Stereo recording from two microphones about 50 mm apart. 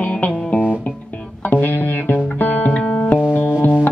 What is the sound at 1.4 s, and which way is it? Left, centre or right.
Music, left.